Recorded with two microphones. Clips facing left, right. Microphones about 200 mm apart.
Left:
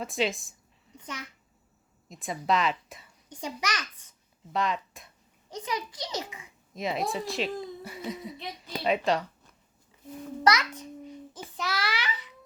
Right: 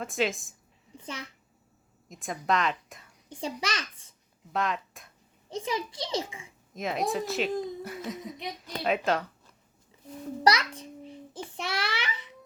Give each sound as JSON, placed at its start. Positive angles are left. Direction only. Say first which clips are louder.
{"t": 0.0, "sound": "speech", "louder": "even", "side_deg": 0}
{"t": 0.9, "sound": "a child's voice", "louder": "right 1 dB", "side_deg": -30}
{"t": 2.0, "sound": "speech", "louder": "left 1 dB", "side_deg": 0}
{"t": 3.2, "sound": "a child's voice", "louder": "right 1 dB", "side_deg": -30}
{"t": 4.5, "sound": "speech", "louder": "left 1 dB", "side_deg": 0}
{"t": 5.5, "sound": "a child's voice", "louder": "right 2 dB", "side_deg": -25}
{"t": 6.7, "sound": "speech", "louder": "right 1 dB", "side_deg": 0}
{"t": 10.4, "sound": "a sound", "louder": "even", "side_deg": -30}